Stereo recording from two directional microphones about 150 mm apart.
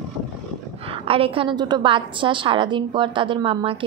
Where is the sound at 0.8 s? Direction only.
40° right (ahead or behind).